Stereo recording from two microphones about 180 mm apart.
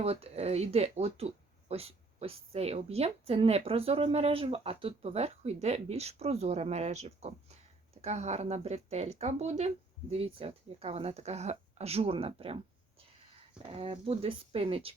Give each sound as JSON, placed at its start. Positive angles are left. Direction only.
{"t": 0.0, "sound": "speech", "side_deg": -35}
{"t": 13.7, "sound": "speech", "side_deg": -30}